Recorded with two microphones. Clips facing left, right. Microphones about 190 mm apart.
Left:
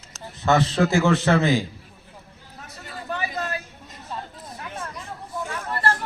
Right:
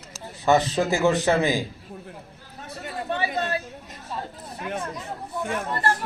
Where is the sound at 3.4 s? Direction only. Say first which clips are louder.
Right 3 dB; 30° right (ahead or behind).